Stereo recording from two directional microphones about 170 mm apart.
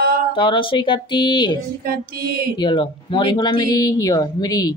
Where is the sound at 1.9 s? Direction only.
60° right (ahead or behind).